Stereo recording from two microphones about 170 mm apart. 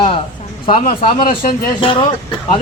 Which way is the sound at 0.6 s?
30° left (ahead or behind).